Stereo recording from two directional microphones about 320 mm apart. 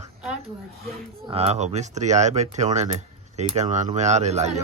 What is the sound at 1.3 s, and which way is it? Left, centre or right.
Speech, centre.